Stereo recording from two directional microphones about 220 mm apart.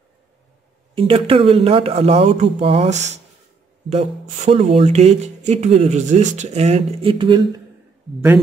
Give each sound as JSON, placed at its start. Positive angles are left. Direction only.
{"t": 0.9, "sound": "speech", "side_deg": -25}